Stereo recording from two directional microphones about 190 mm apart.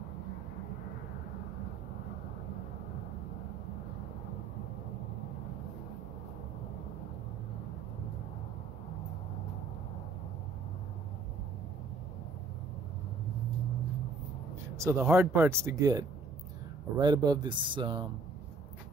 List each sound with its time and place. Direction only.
14.8 s speech: 15° right (ahead or behind)